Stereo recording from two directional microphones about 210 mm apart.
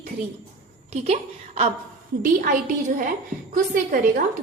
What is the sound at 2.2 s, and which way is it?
A woman's voice, 35° right (ahead or behind).